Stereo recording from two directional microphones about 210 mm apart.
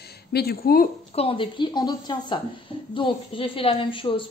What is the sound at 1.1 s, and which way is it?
A woman's voice, 25° left (ahead or behind).